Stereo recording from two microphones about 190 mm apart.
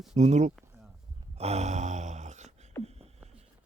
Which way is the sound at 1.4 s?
35° right (ahead or behind).